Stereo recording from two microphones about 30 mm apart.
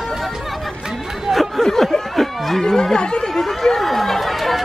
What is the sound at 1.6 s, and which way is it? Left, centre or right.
Snicker, centre.